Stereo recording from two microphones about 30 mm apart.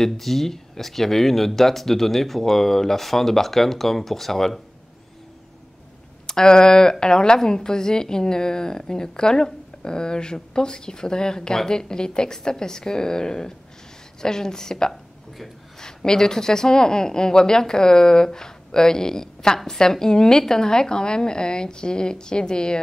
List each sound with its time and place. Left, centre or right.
0.0 s speech: centre
6.2 s a woman's voice: left